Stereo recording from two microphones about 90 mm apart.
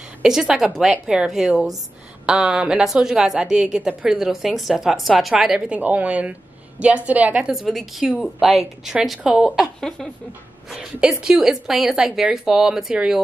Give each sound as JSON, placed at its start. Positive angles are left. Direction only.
{"t": 0.2, "sound": "a woman's voice", "side_deg": -5}
{"t": 7.5, "sound": "a woman's voice", "side_deg": -5}
{"t": 9.8, "sound": "speech", "side_deg": 5}
{"t": 10.7, "sound": "a woman's voice", "side_deg": -5}